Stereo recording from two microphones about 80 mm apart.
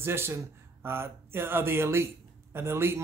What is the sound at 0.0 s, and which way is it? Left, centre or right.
A man's voice, right.